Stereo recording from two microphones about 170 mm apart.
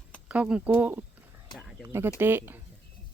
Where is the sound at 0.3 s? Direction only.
5° right (ahead or behind).